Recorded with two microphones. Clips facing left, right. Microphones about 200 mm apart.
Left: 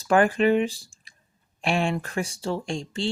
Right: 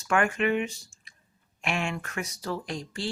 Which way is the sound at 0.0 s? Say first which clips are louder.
Left 6 dB; 35° left (ahead or behind).